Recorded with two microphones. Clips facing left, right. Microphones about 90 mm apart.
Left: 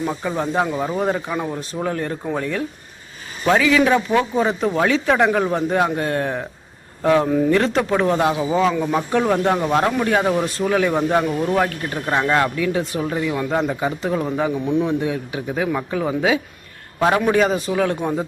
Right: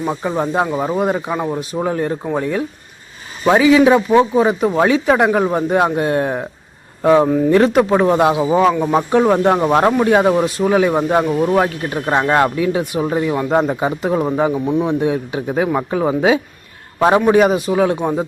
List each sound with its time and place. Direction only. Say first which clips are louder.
0.0 s speech: right 3 dB; 20° right (ahead or behind)
14.5 s speech: right 3 dB; 35° right (ahead or behind)
14.8 s speech: right 4 dB; 25° right (ahead or behind)